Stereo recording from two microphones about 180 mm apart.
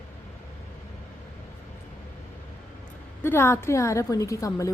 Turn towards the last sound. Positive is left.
turn(degrees=20)  # may be behind; listen again after turning